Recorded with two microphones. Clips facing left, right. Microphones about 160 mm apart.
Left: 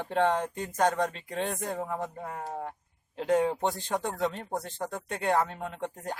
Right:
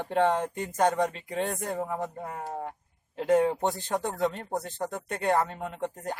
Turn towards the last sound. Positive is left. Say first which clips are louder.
# right 2 dB
turn(degrees=-10)  # may be behind; listen again after turning